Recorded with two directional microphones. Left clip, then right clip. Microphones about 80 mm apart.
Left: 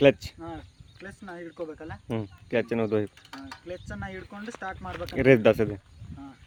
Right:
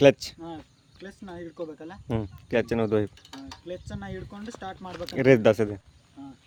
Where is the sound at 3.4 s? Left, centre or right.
Centre.